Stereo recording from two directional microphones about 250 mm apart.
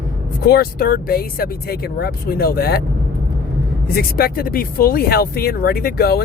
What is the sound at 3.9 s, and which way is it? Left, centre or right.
Speech, left.